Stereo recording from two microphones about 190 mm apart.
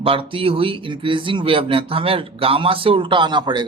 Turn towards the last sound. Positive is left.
turn(degrees=-25)  # may be behind; listen again after turning